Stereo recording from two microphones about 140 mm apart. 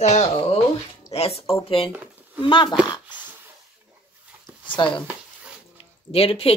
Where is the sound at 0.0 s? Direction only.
50° left (ahead or behind).